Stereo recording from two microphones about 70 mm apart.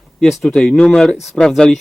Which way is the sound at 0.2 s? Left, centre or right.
Centre.